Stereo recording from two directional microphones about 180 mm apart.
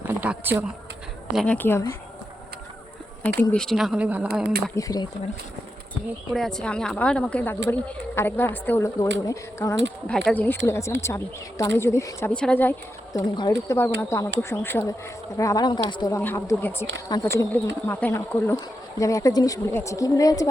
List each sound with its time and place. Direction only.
0.1 s a sound: 10° right (ahead or behind)
1.3 s a woman's voice: centre (ahead or behind)
1.5 s speech: 10° left (ahead or behind)
3.5 s a woman's voice: 5° left (ahead or behind)
4.7 s speech: 20° left (ahead or behind)
6.3 s a woman's voice: centre (ahead or behind); by 9.7 s 15° left (ahead or behind)
10.1 s speech: 5° left (ahead or behind)
13.1 s speech: 20° left (ahead or behind)